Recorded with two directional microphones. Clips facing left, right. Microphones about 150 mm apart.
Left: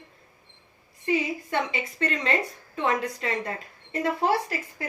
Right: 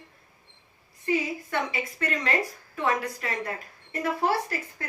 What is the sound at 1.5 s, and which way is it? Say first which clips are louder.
A woman's voice: left 1 dB; 25° left (ahead or behind).